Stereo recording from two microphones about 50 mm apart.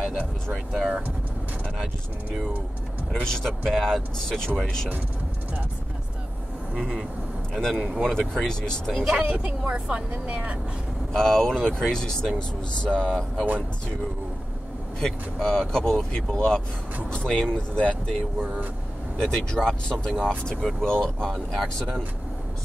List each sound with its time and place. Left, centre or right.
0.7 s speech: centre
3.1 s speech: centre
6.8 s speech: centre
8.9 s speech: right
11.1 s speech: centre
15.0 s speech: centre
19.1 s speech: centre